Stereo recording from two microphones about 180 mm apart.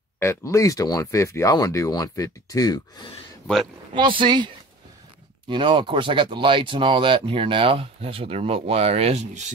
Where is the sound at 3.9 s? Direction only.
25° right (ahead or behind).